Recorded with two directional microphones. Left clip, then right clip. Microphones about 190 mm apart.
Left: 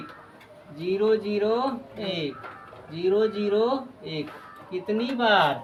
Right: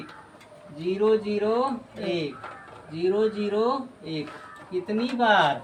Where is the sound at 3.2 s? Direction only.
15° left (ahead or behind).